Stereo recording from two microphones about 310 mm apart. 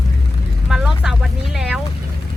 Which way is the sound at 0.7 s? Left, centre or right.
Centre.